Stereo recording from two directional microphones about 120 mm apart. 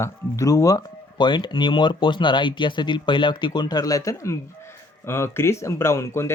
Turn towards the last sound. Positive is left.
turn(degrees=20)  # may be behind; listen again after turning